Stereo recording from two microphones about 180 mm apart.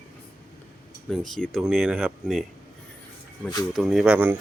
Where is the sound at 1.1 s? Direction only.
Centre (ahead or behind).